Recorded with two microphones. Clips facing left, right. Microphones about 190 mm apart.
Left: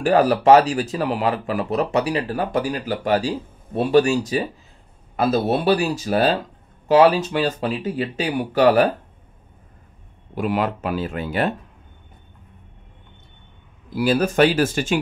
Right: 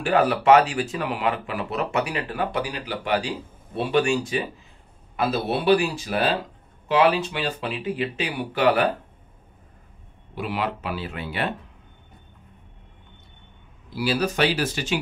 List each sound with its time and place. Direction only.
0.0 s speech: 40° left (ahead or behind)
10.3 s speech: 45° left (ahead or behind)
13.9 s speech: 50° left (ahead or behind)